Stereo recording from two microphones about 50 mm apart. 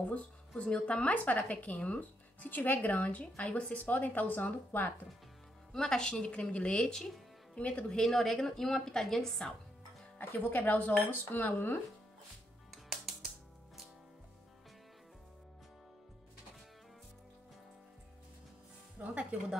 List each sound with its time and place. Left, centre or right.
0.0 s speech: left
5.7 s a woman's voice: centre
8.0 s a woman's voice: centre
10.1 s speech: left
12.7 s music: centre
19.0 s music: right